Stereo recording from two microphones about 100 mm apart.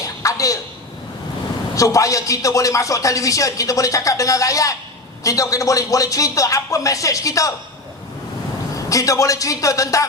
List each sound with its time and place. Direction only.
0.0 s a sound: 35° left (ahead or behind)
1.7 s speech: 35° left (ahead or behind)
8.9 s speech: 35° left (ahead or behind)